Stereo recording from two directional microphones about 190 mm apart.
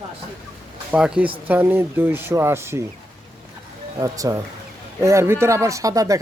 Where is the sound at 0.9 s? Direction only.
5° right (ahead or behind).